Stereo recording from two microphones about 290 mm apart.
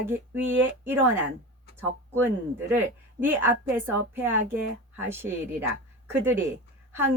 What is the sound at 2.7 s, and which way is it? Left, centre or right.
A woman's voice, centre.